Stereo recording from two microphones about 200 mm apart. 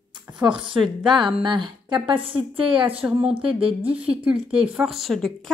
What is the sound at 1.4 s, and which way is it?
Speech, 20° right (ahead or behind).